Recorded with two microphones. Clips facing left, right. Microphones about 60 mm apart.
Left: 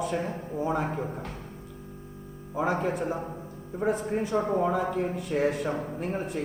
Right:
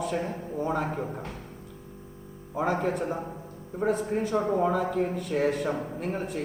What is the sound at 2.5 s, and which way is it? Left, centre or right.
Speech, centre.